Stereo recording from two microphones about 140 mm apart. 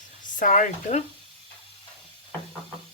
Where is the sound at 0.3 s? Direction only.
65° left (ahead or behind).